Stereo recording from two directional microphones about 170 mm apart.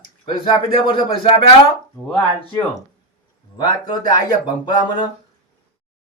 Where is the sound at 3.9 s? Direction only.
25° left (ahead or behind).